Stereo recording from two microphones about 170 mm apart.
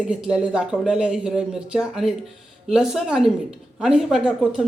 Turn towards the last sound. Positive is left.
turn(degrees=-5)  # may be behind; listen again after turning